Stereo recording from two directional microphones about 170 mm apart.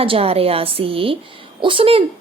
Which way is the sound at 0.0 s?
35° right (ahead or behind).